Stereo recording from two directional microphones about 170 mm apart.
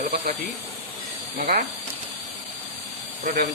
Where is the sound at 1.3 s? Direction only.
60° right (ahead or behind).